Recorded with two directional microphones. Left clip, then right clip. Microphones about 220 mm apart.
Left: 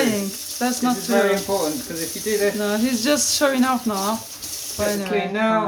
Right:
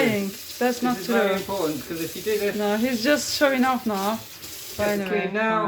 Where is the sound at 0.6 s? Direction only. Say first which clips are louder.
Right 1 dB; 5° left (ahead or behind).